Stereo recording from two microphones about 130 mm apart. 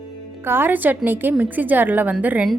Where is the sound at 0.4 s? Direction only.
15° right (ahead or behind).